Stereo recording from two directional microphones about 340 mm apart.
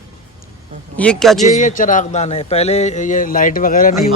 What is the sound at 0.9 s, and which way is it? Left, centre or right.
Speech, centre.